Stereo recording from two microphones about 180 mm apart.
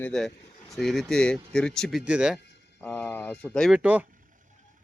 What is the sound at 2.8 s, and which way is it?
Speech, 10° left (ahead or behind).